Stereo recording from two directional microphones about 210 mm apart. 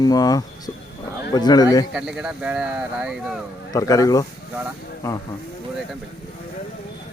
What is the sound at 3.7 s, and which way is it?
Speech, 15° left (ahead or behind).